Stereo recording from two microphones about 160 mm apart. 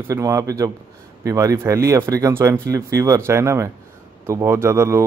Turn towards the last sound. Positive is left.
turn(degrees=-15)  # may be behind; listen again after turning